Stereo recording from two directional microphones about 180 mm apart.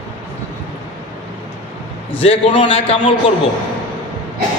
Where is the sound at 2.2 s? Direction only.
30° left (ahead or behind).